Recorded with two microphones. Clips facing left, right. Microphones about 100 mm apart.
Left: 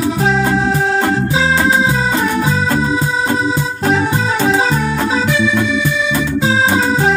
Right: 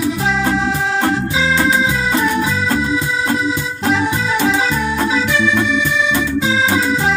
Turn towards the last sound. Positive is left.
turn(degrees=35)  # may be behind; listen again after turning